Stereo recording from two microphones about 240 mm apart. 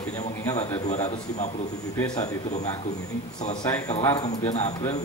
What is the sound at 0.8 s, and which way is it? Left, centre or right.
Speech, left.